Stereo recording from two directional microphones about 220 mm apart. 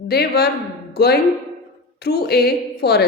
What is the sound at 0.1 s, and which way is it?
A woman's voice, 45° left (ahead or behind).